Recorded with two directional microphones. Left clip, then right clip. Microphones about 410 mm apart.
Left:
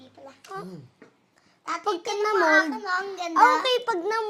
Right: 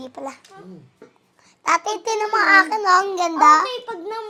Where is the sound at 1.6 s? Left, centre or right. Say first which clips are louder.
Right 8 dB; right.